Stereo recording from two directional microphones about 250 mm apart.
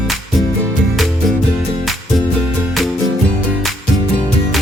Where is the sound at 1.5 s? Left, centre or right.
Centre.